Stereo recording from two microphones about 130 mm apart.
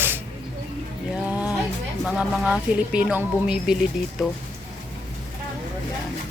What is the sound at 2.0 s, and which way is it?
A woman's voice, 5° right (ahead or behind).